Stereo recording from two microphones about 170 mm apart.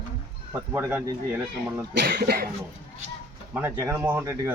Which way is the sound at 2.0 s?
65° right (ahead or behind).